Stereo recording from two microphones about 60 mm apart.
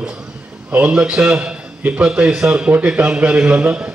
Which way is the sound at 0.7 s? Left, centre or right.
Centre.